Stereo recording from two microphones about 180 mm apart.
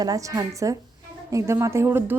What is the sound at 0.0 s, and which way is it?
A woman's voice, 20° right (ahead or behind).